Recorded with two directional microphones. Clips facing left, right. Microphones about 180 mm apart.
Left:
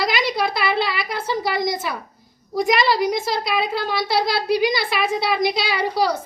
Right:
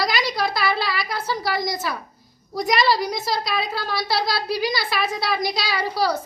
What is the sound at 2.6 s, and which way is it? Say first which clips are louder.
A woman's voice: left 1 dB; 20° left (ahead or behind).